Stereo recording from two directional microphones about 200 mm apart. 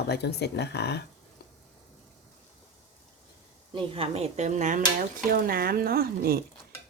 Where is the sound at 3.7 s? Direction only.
30° right (ahead or behind).